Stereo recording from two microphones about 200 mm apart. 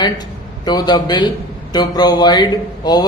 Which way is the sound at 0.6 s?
20° left (ahead or behind).